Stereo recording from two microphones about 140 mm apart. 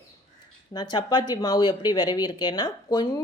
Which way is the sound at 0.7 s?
30° left (ahead or behind).